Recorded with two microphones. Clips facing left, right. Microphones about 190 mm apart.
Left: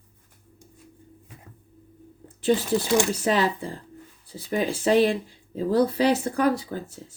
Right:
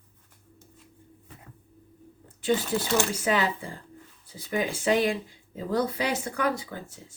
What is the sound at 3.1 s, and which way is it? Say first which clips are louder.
Speech: left 3 dB; 35° left (ahead or behind).